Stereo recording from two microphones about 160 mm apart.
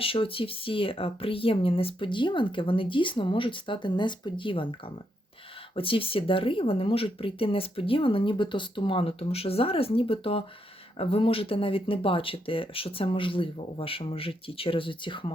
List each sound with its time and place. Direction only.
0.0 s speech: 35° left (ahead or behind)
5.7 s speech: 35° left (ahead or behind)